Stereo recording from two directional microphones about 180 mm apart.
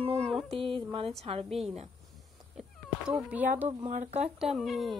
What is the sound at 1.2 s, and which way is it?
Speech, 35° right (ahead or behind).